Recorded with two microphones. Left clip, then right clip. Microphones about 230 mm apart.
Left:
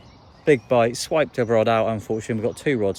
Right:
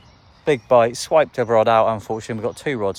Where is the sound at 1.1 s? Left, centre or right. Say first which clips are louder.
Right 6 dB; right.